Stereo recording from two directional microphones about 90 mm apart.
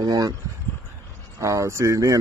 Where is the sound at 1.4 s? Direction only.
35° right (ahead or behind).